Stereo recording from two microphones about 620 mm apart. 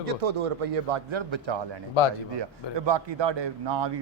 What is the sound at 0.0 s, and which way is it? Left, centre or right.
A man's voice, right.